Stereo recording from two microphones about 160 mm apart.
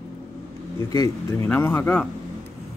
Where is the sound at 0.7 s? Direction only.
20° left (ahead or behind).